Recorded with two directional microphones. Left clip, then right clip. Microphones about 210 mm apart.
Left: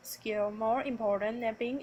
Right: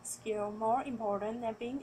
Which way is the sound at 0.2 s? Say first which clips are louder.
Left 3 dB; 40° left (ahead or behind).